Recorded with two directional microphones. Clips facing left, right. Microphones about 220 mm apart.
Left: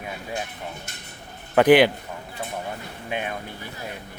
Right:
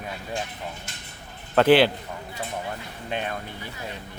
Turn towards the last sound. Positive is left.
turn(degrees=10)  # may be behind; listen again after turning